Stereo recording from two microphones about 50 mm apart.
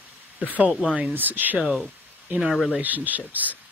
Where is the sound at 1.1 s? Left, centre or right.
Right.